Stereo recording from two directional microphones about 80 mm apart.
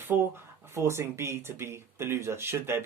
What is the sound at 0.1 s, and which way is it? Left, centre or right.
Speech, right.